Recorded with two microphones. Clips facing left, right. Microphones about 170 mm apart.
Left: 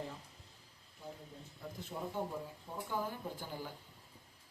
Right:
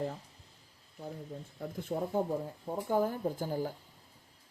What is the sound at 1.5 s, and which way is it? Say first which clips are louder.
Speech: right 9 dB; 50° right (ahead or behind).